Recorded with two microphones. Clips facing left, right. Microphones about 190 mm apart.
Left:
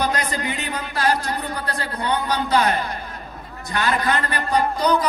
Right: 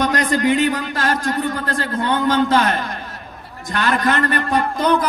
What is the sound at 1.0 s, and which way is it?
A man's voice, 45° right (ahead or behind).